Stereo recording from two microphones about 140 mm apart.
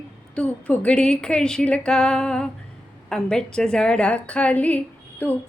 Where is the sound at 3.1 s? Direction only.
5° left (ahead or behind).